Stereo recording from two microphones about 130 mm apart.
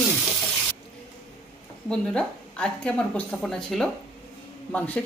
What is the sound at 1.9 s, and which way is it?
Speech, 5° left (ahead or behind).